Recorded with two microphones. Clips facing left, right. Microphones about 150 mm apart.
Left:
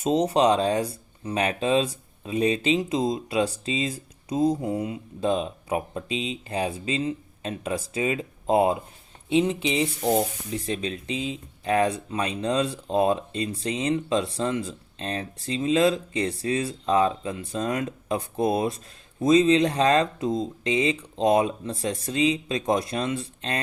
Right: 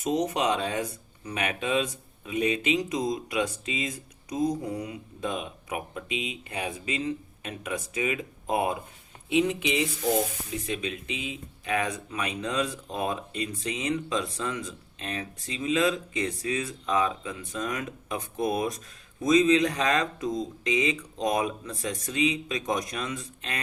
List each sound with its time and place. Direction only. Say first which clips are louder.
0.0 s speech: left 6 dB; 30° left (ahead or behind)